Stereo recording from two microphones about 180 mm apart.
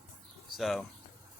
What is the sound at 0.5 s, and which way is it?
Speech, centre (ahead or behind).